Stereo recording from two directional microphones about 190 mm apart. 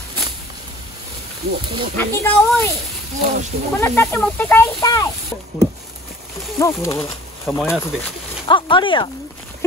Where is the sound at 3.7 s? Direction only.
10° left (ahead or behind).